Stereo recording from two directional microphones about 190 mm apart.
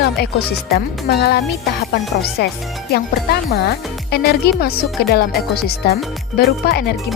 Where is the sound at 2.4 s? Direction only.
60° left (ahead or behind).